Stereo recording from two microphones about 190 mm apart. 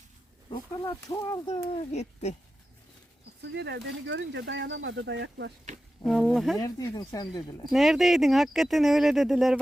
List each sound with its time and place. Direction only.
0.5 s speech: 20° left (ahead or behind); by 2.3 s 35° left (ahead or behind)
3.4 s speech: 65° right (ahead or behind)
6.1 s speech: 5° left (ahead or behind)
6.6 s speech: 20° left (ahead or behind)
7.7 s speech: centre (ahead or behind)